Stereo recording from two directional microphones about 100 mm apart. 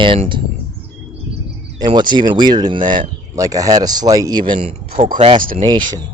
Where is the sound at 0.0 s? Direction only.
60° right (ahead or behind).